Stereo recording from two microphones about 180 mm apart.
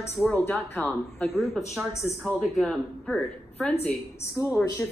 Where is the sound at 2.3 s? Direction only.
Centre (ahead or behind).